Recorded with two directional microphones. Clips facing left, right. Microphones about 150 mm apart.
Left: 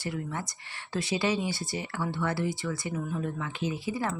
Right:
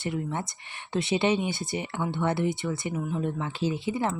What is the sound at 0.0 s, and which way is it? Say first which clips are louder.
Speech: right 4 dB; 25° right (ahead or behind).